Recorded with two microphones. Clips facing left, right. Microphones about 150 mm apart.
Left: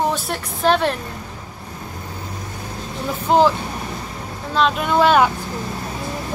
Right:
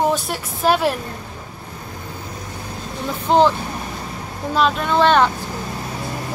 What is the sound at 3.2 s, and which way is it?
Speech, 5° left (ahead or behind).